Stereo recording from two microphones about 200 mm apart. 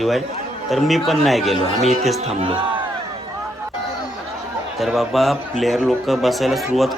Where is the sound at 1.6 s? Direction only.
35° left (ahead or behind).